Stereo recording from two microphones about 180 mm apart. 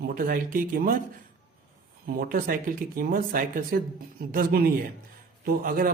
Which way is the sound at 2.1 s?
55° right (ahead or behind).